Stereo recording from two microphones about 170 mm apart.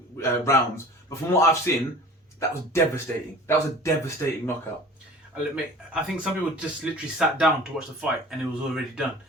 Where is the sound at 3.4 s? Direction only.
15° left (ahead or behind).